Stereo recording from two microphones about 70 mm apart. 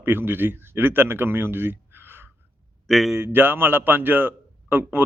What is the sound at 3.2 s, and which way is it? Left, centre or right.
A man's voice, right.